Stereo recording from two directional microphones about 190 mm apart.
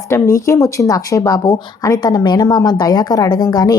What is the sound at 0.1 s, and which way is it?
Speech, 15° left (ahead or behind).